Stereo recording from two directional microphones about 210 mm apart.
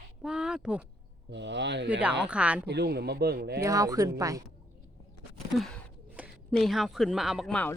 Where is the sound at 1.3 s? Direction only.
55° right (ahead or behind).